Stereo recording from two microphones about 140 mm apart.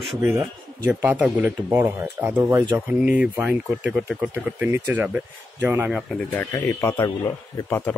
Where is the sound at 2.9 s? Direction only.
5° right (ahead or behind).